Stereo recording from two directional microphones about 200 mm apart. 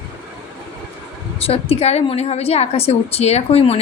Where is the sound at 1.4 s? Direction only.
30° left (ahead or behind).